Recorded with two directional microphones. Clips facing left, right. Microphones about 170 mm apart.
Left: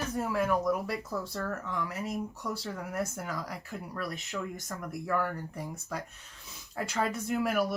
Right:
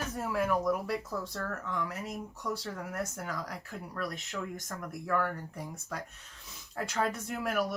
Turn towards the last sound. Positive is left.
turn(degrees=5)  # may be behind; listen again after turning